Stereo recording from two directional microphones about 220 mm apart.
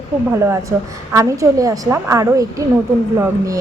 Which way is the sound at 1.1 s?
15° right (ahead or behind).